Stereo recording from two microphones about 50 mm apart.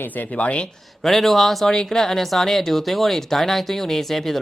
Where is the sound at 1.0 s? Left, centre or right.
Centre.